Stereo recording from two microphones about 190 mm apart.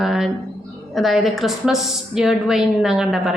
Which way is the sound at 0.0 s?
Centre (ahead or behind).